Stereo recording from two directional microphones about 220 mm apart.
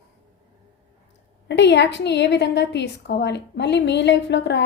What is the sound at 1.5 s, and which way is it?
A woman's voice, 50° left (ahead or behind).